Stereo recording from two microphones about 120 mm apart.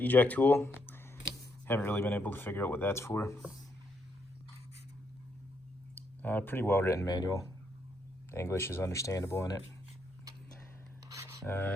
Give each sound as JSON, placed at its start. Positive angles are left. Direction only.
{"t": 0.0, "sound": "speech", "side_deg": 15}
{"t": 5.9, "sound": "speech", "side_deg": 15}
{"t": 11.1, "sound": "a sound", "side_deg": -25}
{"t": 11.4, "sound": "speech", "side_deg": 15}